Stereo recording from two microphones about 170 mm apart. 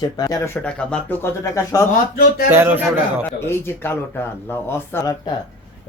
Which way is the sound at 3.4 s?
15° left (ahead or behind).